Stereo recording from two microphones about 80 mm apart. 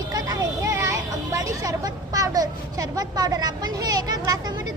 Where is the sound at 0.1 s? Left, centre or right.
Right.